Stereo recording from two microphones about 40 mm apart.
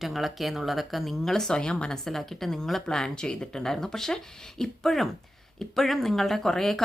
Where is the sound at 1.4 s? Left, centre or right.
Centre.